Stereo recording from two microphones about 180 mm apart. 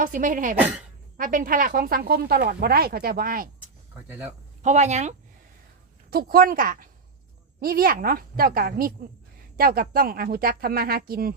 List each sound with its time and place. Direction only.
0.0 s speech: 45° right (ahead or behind)
4.6 s speech: 40° right (ahead or behind)
6.1 s speech: 55° right (ahead or behind)